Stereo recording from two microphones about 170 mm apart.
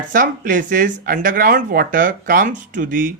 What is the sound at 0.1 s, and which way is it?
Speech, 50° right (ahead or behind).